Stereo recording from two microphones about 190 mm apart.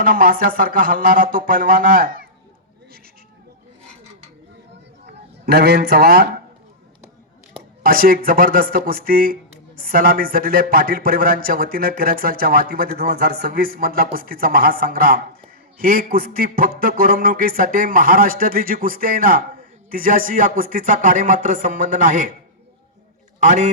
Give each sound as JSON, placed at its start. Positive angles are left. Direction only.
{"t": 0.0, "sound": "speech", "side_deg": -50}
{"t": 5.0, "sound": "a man's voice", "side_deg": -60}
{"t": 7.8, "sound": "speech", "side_deg": -50}
{"t": 23.4, "sound": "a man's voice", "side_deg": -40}